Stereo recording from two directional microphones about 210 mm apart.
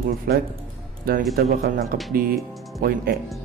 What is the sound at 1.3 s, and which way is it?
Speech, 45° right (ahead or behind).